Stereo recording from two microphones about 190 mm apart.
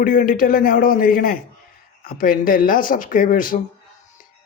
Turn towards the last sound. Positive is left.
turn(degrees=45)  # may be behind; listen again after turning